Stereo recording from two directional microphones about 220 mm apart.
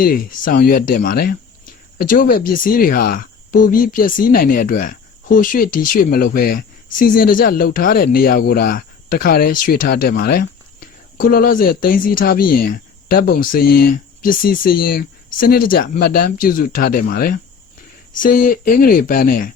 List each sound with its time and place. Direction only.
0.0 s speech: 40° left (ahead or behind)